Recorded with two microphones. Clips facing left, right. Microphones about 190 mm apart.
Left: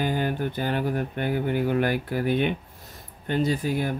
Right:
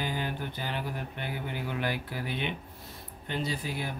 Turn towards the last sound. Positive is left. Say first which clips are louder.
# left 9 dB
turn(degrees=50)  # may be behind; listen again after turning